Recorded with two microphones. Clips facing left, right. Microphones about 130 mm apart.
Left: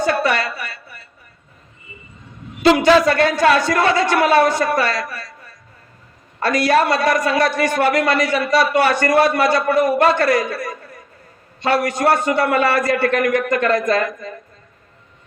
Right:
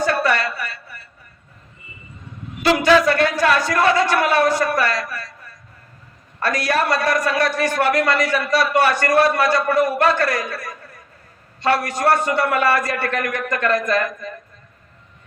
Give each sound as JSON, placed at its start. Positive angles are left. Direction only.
{"t": 0.0, "sound": "a woman's voice", "side_deg": 20}
{"t": 2.6, "sound": "speech", "side_deg": 25}
{"t": 6.4, "sound": "speech", "side_deg": 25}
{"t": 11.6, "sound": "speech", "side_deg": 20}